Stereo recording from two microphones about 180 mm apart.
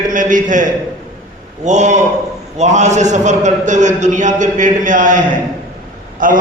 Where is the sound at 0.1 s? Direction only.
45° right (ahead or behind).